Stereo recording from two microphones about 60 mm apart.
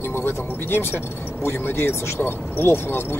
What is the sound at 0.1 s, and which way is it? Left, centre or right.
Speech, left.